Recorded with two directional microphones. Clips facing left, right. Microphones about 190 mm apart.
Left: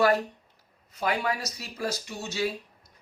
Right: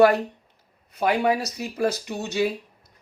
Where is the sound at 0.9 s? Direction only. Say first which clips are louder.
Right 7 dB; 60° right (ahead or behind).